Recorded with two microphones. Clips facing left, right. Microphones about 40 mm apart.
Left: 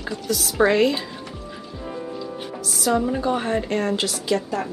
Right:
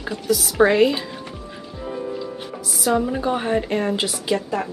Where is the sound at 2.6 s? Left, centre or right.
Centre.